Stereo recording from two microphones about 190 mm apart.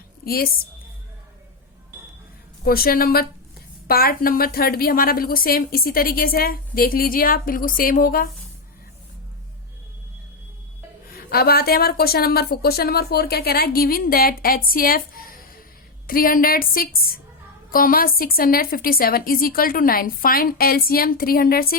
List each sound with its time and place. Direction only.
0.3 s a woman's voice: 50° left (ahead or behind)
2.6 s a woman's voice: 50° left (ahead or behind)
11.1 s a woman's voice: 55° left (ahead or behind)